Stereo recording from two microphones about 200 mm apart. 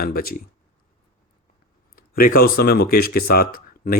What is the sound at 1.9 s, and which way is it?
Speech, 45° left (ahead or behind).